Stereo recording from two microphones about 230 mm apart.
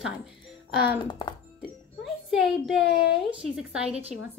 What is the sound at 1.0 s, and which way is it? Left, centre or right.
Speech, centre.